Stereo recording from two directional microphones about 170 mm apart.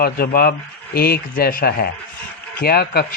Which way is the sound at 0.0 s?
65° left (ahead or behind).